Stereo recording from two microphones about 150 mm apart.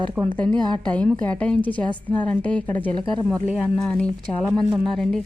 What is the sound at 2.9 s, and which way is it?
Speech, 30° right (ahead or behind).